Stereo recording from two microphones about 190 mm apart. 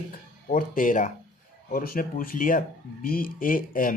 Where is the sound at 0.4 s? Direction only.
45° left (ahead or behind).